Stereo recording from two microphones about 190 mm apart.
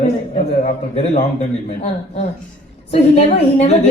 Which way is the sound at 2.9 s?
35° left (ahead or behind).